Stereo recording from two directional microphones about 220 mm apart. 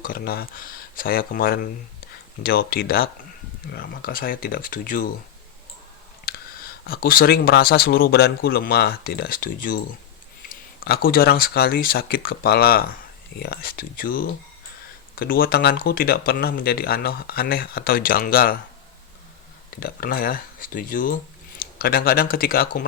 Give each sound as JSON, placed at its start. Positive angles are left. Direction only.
{"t": 0.0, "sound": "speech", "side_deg": 40}
{"t": 6.2, "sound": "speech", "side_deg": 45}
{"t": 19.7, "sound": "speech", "side_deg": 40}